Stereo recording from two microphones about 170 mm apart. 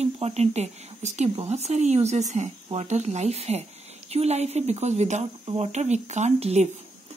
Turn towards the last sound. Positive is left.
turn(degrees=-40)  # may be behind; listen again after turning